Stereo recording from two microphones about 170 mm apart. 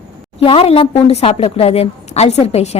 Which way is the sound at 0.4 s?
35° left (ahead or behind).